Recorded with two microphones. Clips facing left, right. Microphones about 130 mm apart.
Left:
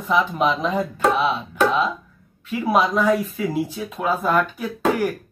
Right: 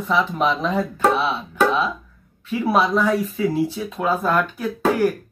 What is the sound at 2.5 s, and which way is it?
Speech, centre (ahead or behind).